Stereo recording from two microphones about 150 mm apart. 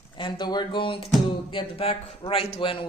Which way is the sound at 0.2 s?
30° left (ahead or behind).